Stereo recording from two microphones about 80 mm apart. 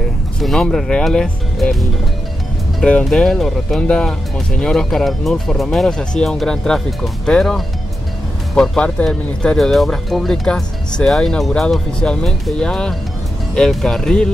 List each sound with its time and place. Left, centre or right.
0.4 s speech: centre